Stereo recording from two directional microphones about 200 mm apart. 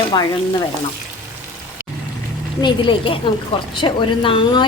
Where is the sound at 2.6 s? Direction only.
25° left (ahead or behind).